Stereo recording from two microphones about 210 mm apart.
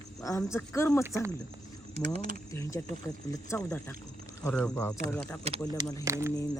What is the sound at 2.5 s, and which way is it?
Speech, 15° left (ahead or behind).